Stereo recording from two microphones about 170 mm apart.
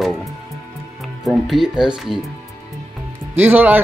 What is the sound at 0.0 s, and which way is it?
Music, centre (ahead or behind).